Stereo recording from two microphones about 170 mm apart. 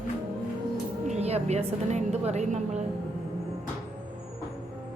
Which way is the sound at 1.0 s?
40° right (ahead or behind).